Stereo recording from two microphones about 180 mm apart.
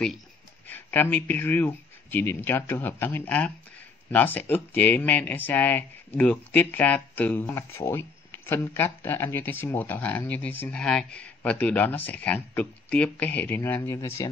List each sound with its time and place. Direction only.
0.7 s speech: 10° left (ahead or behind)